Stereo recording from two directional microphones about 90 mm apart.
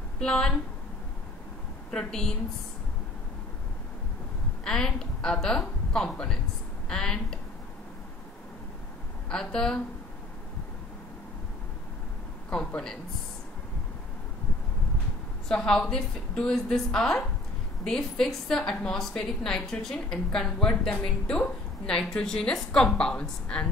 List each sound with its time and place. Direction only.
0.2 s a woman's voice: 10° left (ahead or behind)
1.9 s a woman's voice: 10° left (ahead or behind)
4.6 s a woman's voice: 5° left (ahead or behind)
9.3 s a woman's voice: 5° left (ahead or behind)
12.4 s a woman's voice: 10° left (ahead or behind)
15.4 s a woman's voice: 5° left (ahead or behind)